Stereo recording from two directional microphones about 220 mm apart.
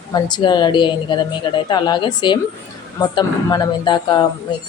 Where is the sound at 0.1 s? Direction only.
20° left (ahead or behind).